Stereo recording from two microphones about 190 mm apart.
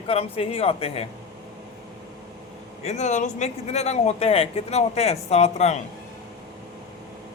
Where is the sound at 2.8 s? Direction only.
35° left (ahead or behind).